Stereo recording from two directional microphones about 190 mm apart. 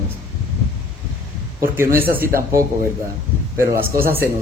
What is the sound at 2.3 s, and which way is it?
Speech, 15° right (ahead or behind).